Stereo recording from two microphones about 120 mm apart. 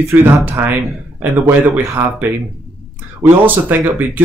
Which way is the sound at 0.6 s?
20° right (ahead or behind).